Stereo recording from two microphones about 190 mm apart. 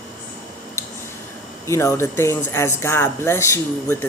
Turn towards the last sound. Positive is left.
turn(degrees=15)  # may be behind; listen again after turning